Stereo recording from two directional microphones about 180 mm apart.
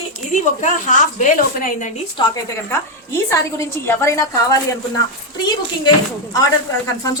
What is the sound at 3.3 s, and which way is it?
A woman's voice, 15° left (ahead or behind).